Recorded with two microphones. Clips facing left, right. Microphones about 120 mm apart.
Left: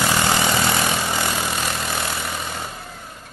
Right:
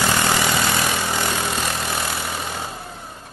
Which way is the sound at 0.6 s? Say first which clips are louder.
Left 1 dB; 15° left (ahead or behind).